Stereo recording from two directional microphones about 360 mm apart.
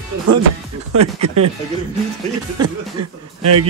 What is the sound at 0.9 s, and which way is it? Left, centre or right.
Speech, right.